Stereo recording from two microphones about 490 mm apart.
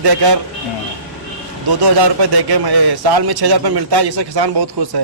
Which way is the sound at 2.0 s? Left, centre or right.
Right.